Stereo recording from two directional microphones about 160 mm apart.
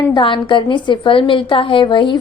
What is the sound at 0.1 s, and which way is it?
A woman's voice, 30° left (ahead or behind).